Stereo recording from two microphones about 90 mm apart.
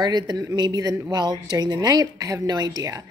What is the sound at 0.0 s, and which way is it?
A woman's voice, 50° right (ahead or behind).